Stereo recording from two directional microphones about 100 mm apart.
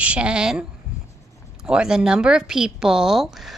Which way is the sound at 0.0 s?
10° right (ahead or behind).